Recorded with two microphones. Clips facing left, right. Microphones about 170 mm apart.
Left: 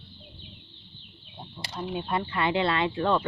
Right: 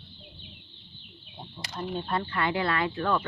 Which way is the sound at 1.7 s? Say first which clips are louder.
Left 1 dB; 10° left (ahead or behind).